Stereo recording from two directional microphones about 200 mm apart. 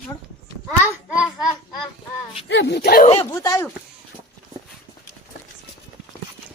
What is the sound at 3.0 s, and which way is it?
Speech, 30° left (ahead or behind).